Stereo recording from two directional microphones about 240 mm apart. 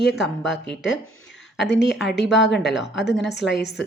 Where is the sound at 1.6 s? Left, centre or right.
Left.